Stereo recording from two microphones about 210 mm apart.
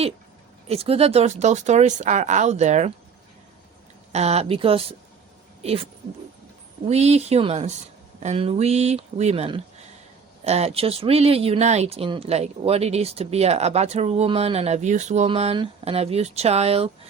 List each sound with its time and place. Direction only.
0.7 s speech: 30° right (ahead or behind)
4.1 s speech: 30° right (ahead or behind)